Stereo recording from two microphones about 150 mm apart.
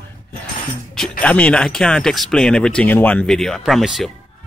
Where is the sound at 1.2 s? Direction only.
10° left (ahead or behind).